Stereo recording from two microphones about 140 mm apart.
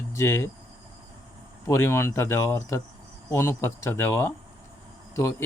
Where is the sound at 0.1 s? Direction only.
20° left (ahead or behind).